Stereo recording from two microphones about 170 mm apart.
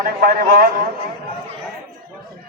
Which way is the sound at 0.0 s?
60° right (ahead or behind).